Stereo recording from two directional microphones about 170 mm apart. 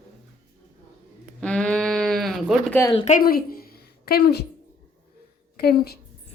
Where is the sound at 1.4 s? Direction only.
5° left (ahead or behind).